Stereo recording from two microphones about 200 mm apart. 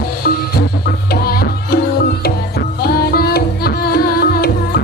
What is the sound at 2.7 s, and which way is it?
Music, 50° left (ahead or behind).